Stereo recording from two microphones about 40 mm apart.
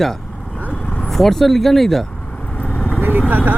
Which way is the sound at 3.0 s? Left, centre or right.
Right.